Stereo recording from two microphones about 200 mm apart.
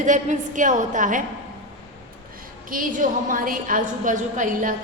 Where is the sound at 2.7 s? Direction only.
40° right (ahead or behind).